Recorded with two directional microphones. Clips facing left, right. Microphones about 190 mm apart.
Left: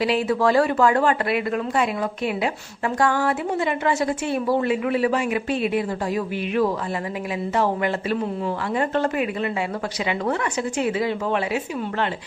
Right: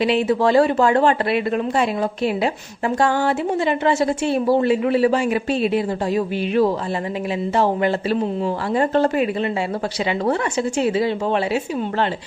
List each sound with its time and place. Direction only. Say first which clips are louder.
0.0 s a woman's voice: right 3 dB; 25° right (ahead or behind)